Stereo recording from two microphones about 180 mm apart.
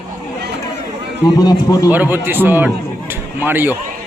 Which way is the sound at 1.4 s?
20° left (ahead or behind).